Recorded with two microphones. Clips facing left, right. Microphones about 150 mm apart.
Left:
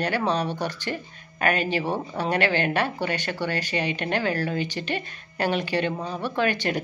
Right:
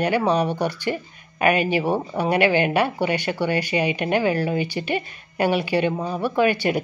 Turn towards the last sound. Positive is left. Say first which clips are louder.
# right 5 dB
turn(degrees=-10)  # may be behind; listen again after turning